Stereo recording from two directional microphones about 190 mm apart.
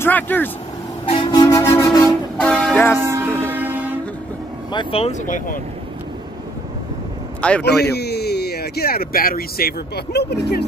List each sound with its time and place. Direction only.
0.0 s speech: 10° left (ahead or behind)
1.0 s vehicle: 25° left (ahead or behind)
2.5 s train: 5° left (ahead or behind)
3.0 s music: 15° right (ahead or behind)
4.7 s speech: 30° left (ahead or behind)
5.2 s speech: 45° left (ahead or behind)
7.6 s speech: 60° left (ahead or behind)